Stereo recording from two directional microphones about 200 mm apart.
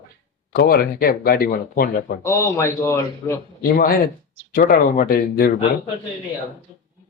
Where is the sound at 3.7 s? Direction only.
45° left (ahead or behind).